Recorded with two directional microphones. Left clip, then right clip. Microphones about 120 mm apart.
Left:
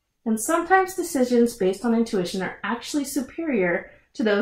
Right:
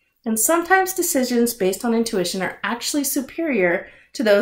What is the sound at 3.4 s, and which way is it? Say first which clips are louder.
Speech: right 4 dB; 20° right (ahead or behind).